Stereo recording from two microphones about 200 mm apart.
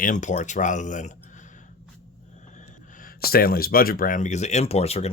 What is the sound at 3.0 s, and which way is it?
Speech, 50° left (ahead or behind).